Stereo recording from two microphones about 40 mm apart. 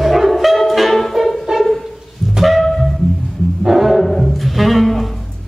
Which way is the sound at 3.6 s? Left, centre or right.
Centre.